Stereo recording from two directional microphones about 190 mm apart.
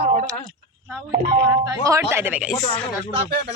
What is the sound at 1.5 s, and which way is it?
Speech, 15° right (ahead or behind).